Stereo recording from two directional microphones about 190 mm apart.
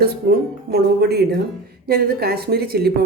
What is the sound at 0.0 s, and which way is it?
A woman's voice, 55° right (ahead or behind).